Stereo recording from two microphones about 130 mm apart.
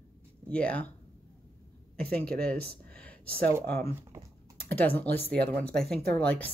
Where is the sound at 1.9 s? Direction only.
10° left (ahead or behind).